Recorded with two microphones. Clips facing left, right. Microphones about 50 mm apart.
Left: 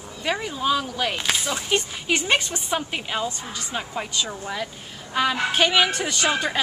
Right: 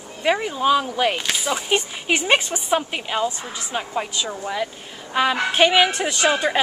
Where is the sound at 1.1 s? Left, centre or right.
Centre.